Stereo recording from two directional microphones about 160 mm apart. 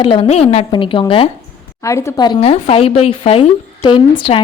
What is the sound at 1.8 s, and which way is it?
Speech, 20° left (ahead or behind).